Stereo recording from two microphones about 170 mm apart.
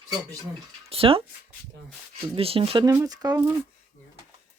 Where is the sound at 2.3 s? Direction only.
35° right (ahead or behind).